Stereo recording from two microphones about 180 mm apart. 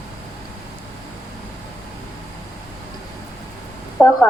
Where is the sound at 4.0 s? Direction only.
5° left (ahead or behind).